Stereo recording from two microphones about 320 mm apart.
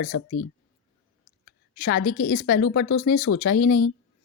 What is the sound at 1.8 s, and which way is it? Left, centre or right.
Speech, left.